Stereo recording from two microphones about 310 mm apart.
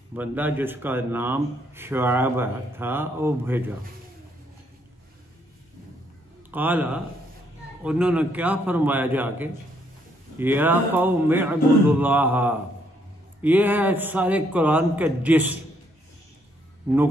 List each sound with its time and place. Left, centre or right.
0.1 s a man's voice: centre
6.5 s a man's voice: centre
16.9 s a man's voice: centre